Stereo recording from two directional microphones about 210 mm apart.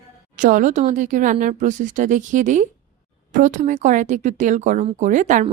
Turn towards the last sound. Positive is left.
turn(degrees=-35)  # may be behind; listen again after turning